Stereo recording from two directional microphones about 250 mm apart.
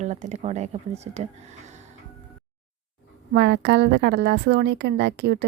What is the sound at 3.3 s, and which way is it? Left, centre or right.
A woman's voice, right.